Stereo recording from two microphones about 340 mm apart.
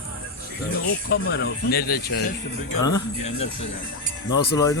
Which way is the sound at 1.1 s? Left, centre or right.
Left.